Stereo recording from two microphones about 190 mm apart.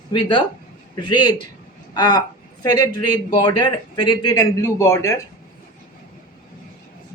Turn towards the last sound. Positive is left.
turn(degrees=15)  # may be behind; listen again after turning